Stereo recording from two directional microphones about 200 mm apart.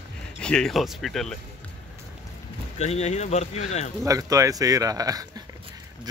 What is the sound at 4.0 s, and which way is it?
Speech, 15° right (ahead or behind).